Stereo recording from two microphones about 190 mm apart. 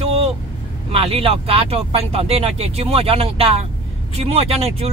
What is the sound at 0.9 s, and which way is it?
Speech, 30° right (ahead or behind).